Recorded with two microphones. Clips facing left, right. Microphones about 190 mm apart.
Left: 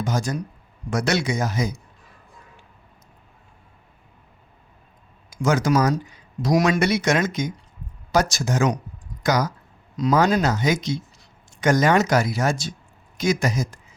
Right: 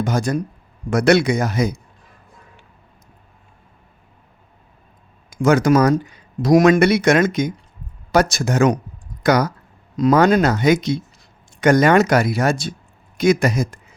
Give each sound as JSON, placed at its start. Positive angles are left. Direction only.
{"t": 0.0, "sound": "speech", "side_deg": -60}
{"t": 5.3, "sound": "speech", "side_deg": -60}